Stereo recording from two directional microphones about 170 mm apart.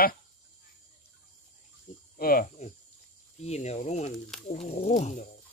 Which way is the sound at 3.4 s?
40° left (ahead or behind).